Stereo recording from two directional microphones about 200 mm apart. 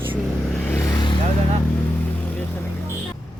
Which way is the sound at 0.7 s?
10° left (ahead or behind).